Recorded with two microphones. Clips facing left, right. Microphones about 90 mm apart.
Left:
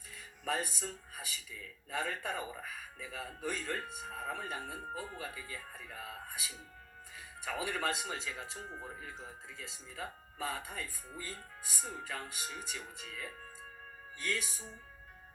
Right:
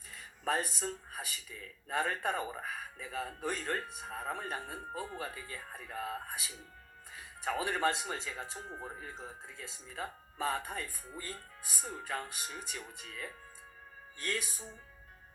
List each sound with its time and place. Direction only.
0.1 s speech: 45° right (ahead or behind)
9.9 s speech: 50° right (ahead or behind)